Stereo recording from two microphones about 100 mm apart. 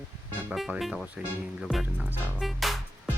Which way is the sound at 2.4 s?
Centre (ahead or behind).